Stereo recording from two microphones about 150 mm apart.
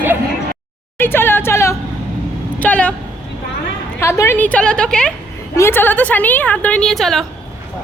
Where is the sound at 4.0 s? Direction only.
15° left (ahead or behind).